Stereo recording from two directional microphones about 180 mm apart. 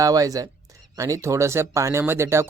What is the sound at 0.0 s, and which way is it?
A man's voice, 20° right (ahead or behind).